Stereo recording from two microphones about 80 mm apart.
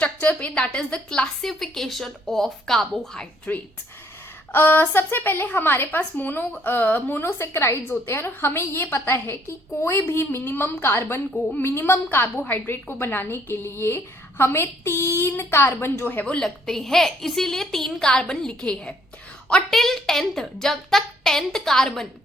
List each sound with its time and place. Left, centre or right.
0.0 s a woman's voice: centre
4.5 s a woman's voice: left
16.3 s a woman's voice: centre